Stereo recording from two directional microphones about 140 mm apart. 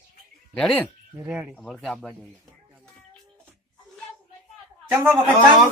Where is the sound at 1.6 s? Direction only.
5° left (ahead or behind).